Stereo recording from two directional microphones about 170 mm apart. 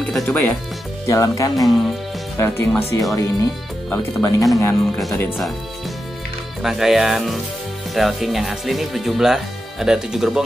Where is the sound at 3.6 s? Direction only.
Centre (ahead or behind).